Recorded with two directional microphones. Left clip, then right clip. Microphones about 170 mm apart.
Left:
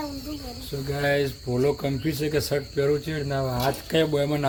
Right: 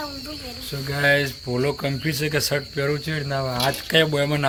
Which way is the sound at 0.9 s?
10° right (ahead or behind).